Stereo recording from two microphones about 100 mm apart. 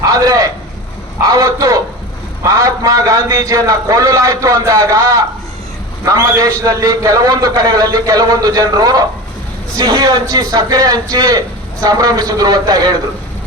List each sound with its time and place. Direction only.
0.1 s a man's voice: 35° right (ahead or behind)